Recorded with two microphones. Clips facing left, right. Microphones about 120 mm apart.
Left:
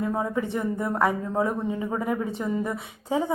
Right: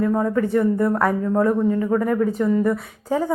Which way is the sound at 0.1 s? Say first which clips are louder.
Right 7 dB; 10° left (ahead or behind).